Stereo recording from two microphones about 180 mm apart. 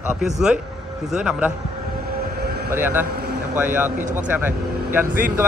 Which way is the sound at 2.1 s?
60° right (ahead or behind).